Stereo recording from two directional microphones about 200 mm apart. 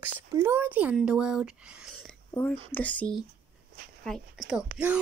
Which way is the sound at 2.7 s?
5° left (ahead or behind).